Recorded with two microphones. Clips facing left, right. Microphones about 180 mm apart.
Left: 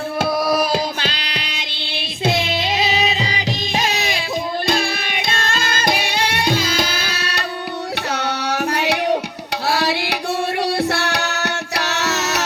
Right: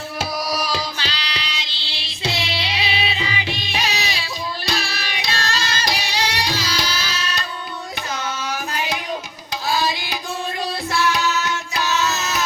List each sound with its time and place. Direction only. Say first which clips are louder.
0.2 s music: left 7 dB; 55° left (ahead or behind)
8.1 s carnatic music: left 3 dB; 70° left (ahead or behind)
9.6 s tabla: left 3 dB; 70° left (ahead or behind)
10.6 s music: left 3 dB; 75° left (ahead or behind)